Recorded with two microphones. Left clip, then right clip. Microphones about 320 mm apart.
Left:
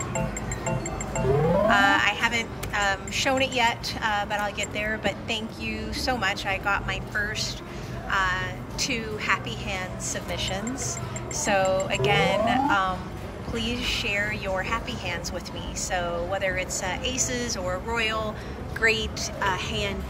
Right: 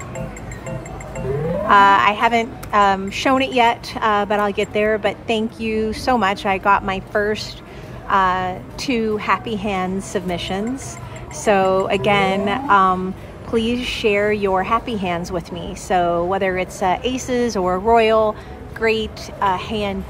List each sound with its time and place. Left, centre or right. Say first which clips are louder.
1.7 s a woman's voice: right 12 dB; centre
11.9 s a woman's voice: right 6 dB; centre